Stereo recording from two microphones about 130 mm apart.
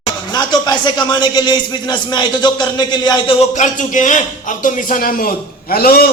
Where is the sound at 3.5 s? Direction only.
70° left (ahead or behind); by 5.3 s 90° left.